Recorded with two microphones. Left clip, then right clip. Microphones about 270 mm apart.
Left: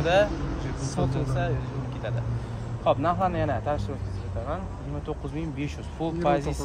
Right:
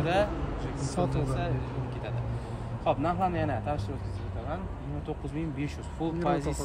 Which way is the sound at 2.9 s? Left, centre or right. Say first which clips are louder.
Left 4 dB; centre.